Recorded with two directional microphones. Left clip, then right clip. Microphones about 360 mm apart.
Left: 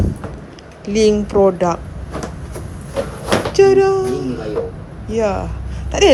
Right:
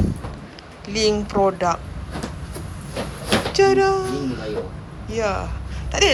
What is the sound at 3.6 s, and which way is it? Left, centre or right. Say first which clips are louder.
Speech: left 5 dB; centre.